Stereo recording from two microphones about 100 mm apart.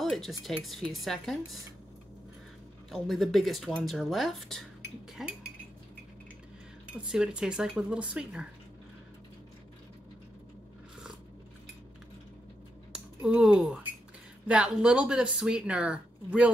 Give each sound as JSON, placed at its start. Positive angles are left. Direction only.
{"t": 0.0, "sound": "speech", "side_deg": 0}
{"t": 2.9, "sound": "speech", "side_deg": 0}
{"t": 5.1, "sound": "speech", "side_deg": -10}
{"t": 6.9, "sound": "speech", "side_deg": -10}
{"t": 12.9, "sound": "speech", "side_deg": -10}